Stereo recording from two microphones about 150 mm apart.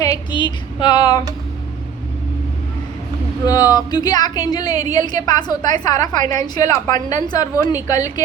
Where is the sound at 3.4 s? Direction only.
25° left (ahead or behind).